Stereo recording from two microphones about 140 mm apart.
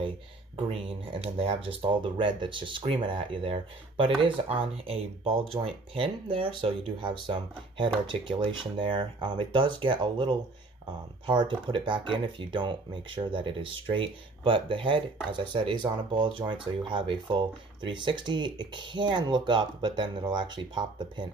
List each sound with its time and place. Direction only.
0.6 s speech: 40° right (ahead or behind)